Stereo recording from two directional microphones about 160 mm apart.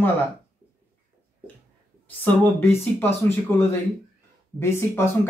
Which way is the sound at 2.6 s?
15° left (ahead or behind).